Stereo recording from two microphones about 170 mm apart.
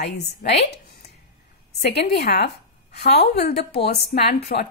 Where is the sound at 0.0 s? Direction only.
70° left (ahead or behind).